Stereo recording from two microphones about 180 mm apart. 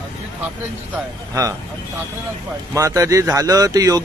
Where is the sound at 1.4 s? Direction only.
20° right (ahead or behind).